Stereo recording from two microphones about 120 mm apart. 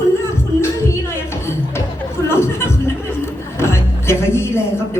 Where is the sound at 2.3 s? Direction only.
20° left (ahead or behind).